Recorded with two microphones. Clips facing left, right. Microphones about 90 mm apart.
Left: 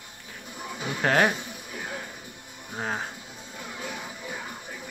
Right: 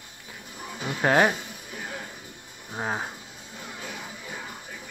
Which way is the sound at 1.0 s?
10° right (ahead or behind).